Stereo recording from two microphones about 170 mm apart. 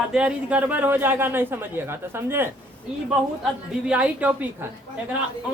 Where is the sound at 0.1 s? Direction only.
5° right (ahead or behind).